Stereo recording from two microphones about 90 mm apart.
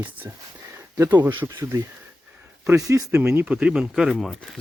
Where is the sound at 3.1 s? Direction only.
25° right (ahead or behind); by 4.1 s 10° right (ahead or behind).